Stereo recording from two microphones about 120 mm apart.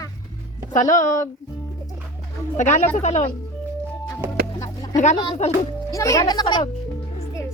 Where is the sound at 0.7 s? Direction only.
90° left.